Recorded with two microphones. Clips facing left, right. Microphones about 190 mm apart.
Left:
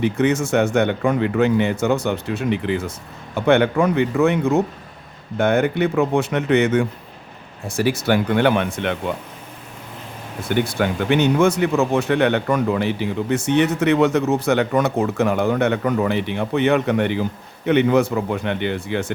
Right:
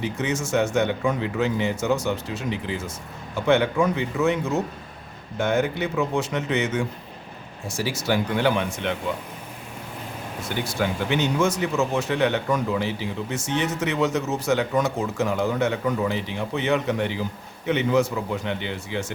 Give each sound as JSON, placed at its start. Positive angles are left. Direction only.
{"t": 0.0, "sound": "speech", "side_deg": 60}
{"t": 10.5, "sound": "speech", "side_deg": 60}